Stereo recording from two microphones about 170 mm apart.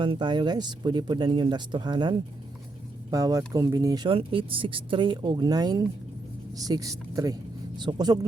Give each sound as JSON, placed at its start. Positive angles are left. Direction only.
{"t": 0.0, "sound": "speech", "side_deg": -30}